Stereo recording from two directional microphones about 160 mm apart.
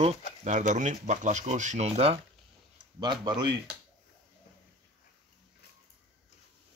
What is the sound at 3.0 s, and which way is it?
Speech, 25° right (ahead or behind).